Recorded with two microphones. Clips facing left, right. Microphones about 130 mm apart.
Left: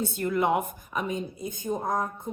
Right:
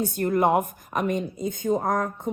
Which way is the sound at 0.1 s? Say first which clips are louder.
Right 5 dB; 50° right (ahead or behind).